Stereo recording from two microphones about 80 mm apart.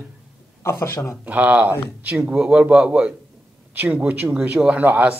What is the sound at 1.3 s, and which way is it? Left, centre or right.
A man's voice, centre.